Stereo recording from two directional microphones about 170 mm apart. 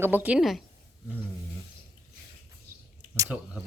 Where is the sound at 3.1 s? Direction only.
15° right (ahead or behind).